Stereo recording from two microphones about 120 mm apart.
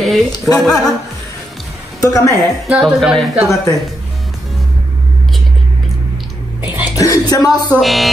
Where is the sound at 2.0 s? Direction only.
25° left (ahead or behind).